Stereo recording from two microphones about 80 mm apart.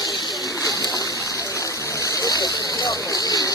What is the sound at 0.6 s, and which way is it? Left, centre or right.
Splash, left.